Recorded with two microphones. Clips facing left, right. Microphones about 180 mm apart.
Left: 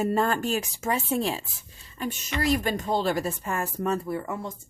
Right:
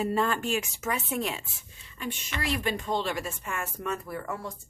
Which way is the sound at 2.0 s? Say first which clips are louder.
Left 5 dB; 40° left (ahead or behind).